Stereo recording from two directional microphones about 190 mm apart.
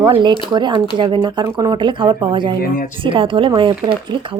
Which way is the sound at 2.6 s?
45° left (ahead or behind).